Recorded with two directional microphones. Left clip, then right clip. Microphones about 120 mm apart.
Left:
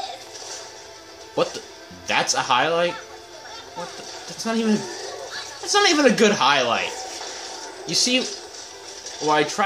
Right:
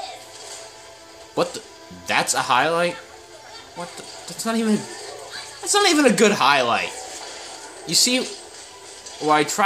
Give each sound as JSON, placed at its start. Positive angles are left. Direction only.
{"t": 1.3, "sound": "a woman's voice", "side_deg": -50}
{"t": 4.4, "sound": "a woman's voice", "side_deg": -50}
{"t": 7.9, "sound": "speech", "side_deg": -55}
{"t": 9.3, "sound": "speech", "side_deg": -55}